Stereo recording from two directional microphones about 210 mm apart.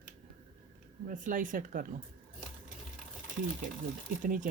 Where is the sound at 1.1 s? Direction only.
40° right (ahead or behind).